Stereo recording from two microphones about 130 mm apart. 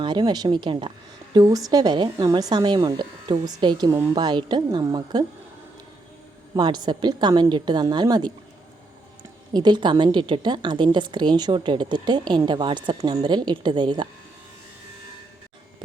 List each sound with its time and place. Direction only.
0.0 s a woman's voice: 35° right (ahead or behind)
6.6 s a woman's voice: 35° right (ahead or behind)
9.5 s a woman's voice: 35° right (ahead or behind)